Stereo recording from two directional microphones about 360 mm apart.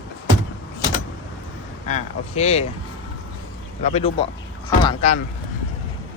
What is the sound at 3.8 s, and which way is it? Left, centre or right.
Speech, centre.